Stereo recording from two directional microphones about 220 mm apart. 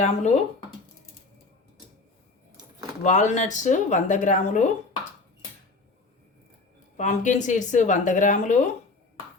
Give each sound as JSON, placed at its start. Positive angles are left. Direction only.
{"t": 0.0, "sound": "speech", "side_deg": 30}
{"t": 3.0, "sound": "speech", "side_deg": 35}
{"t": 6.9, "sound": "speech", "side_deg": 35}